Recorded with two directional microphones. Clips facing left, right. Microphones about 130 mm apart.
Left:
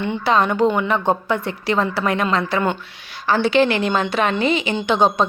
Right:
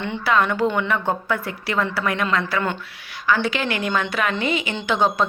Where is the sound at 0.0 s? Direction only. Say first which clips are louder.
Left 3 dB; 25° left (ahead or behind).